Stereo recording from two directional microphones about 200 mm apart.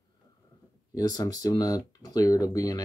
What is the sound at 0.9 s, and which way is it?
Speech, 20° left (ahead or behind).